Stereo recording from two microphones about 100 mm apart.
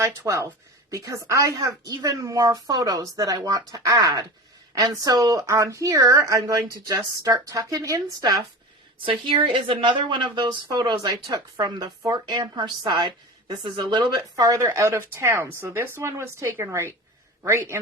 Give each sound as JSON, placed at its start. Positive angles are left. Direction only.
{"t": 0.0, "sound": "speech", "side_deg": -30}
{"t": 9.0, "sound": "a woman's voice", "side_deg": -60}
{"t": 14.6, "sound": "speech", "side_deg": -25}